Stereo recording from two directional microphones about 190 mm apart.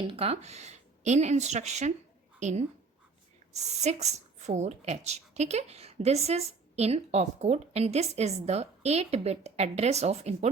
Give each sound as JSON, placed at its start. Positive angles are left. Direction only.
{"t": 0.1, "sound": "a woman's voice", "side_deg": -30}